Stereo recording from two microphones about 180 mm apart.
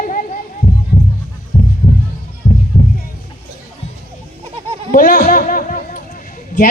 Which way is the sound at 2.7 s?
50° left (ahead or behind).